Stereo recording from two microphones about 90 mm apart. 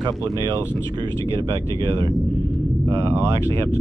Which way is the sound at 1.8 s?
60° right (ahead or behind).